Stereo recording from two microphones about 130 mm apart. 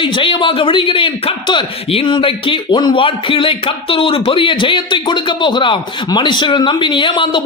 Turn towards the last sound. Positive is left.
turn(degrees=40)  # may be behind; listen again after turning